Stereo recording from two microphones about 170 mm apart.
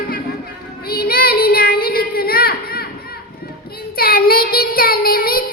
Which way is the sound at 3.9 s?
60° left (ahead or behind).